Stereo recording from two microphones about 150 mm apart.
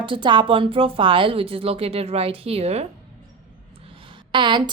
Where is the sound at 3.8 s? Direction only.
35° right (ahead or behind).